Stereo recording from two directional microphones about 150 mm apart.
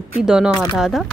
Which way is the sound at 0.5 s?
25° left (ahead or behind).